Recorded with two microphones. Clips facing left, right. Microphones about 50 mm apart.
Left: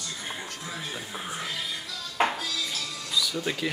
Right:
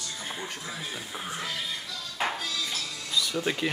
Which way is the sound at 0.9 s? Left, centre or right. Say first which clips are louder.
Left 1 dB; centre.